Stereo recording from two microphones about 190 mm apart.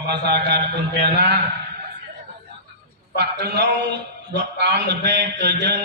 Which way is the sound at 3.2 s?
60° right (ahead or behind).